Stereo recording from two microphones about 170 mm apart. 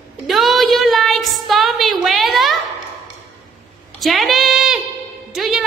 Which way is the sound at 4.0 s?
Centre (ahead or behind).